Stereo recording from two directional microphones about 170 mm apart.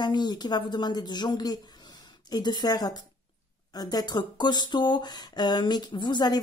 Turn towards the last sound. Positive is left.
turn(degrees=25)  # may be behind; listen again after turning